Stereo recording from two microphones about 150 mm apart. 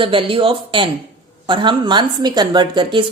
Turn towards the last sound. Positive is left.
turn(degrees=-30)  # may be behind; listen again after turning